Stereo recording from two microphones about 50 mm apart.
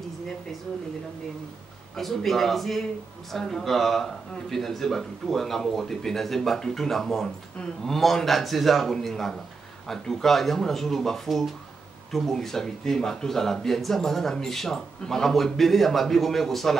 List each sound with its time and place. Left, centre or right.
2.0 s speech: centre